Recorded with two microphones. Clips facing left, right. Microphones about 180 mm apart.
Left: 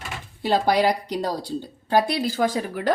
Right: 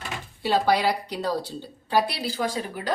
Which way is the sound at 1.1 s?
40° left (ahead or behind).